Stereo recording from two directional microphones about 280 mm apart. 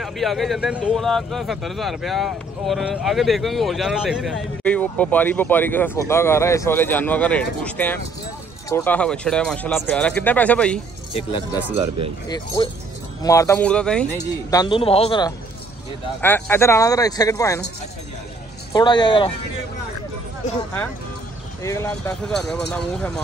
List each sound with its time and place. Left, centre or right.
0.0 s speech: centre
11.6 s speech: centre
12.6 s speech: centre
16.2 s speech: centre
18.7 s speech: centre
21.6 s speech: centre